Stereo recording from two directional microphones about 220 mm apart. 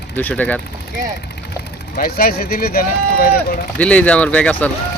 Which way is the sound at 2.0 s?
45° left (ahead or behind).